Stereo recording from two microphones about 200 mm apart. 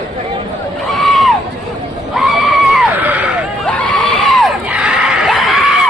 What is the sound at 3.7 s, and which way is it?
Crowd, 5° left (ahead or behind).